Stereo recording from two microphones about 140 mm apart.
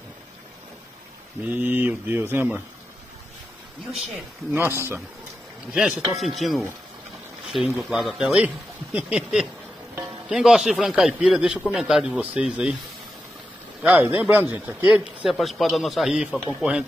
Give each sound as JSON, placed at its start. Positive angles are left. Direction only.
{"t": 1.4, "sound": "speech", "side_deg": -10}
{"t": 4.5, "sound": "speech", "side_deg": -15}
{"t": 5.8, "sound": "speech", "side_deg": -5}
{"t": 7.8, "sound": "speech", "side_deg": 0}
{"t": 13.8, "sound": "speech", "side_deg": -10}
{"t": 15.2, "sound": "speech", "side_deg": 0}